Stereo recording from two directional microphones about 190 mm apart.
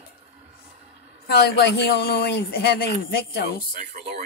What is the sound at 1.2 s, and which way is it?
Speech, 55° left (ahead or behind).